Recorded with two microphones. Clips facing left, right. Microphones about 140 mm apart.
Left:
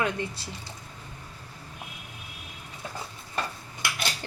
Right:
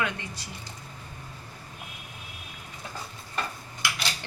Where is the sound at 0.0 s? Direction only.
30° left (ahead or behind).